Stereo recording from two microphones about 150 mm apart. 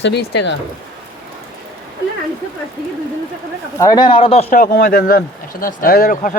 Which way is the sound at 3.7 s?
25° left (ahead or behind).